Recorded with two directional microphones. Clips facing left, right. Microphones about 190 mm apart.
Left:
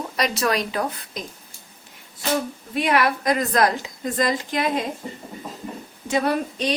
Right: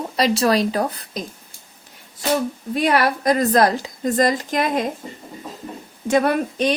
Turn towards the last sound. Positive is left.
turn(degrees=-50)  # may be behind; listen again after turning